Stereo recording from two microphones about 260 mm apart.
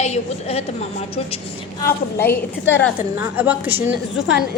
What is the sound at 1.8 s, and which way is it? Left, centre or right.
A woman's voice, centre.